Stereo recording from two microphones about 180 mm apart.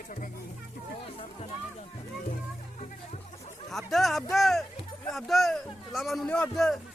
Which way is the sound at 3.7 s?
Centre (ahead or behind).